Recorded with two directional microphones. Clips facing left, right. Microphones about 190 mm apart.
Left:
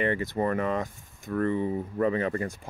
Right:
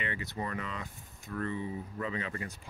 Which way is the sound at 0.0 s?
50° left (ahead or behind).